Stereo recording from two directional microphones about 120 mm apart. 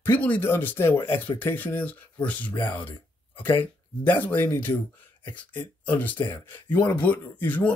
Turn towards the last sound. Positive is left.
turn(degrees=15)  # may be behind; listen again after turning